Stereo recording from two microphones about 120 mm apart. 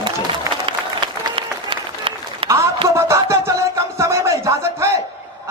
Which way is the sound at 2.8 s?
25° right (ahead or behind).